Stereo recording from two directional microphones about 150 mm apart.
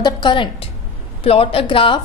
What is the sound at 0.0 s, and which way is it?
A woman's voice, 30° left (ahead or behind).